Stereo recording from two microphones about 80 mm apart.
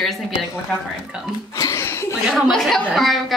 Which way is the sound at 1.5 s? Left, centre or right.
Left.